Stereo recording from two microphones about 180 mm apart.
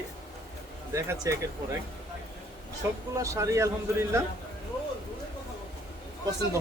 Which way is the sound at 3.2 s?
15° right (ahead or behind).